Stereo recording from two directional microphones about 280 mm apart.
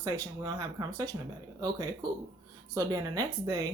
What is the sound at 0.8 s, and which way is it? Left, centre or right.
Speech, centre.